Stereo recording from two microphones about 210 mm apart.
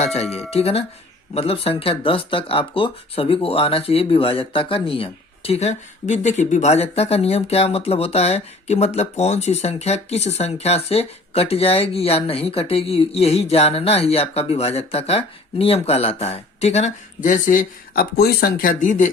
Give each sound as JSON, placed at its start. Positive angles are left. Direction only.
{"t": 0.0, "sound": "speech", "side_deg": 30}